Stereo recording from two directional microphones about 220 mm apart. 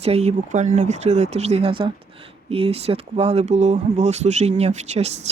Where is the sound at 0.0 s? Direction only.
30° right (ahead or behind).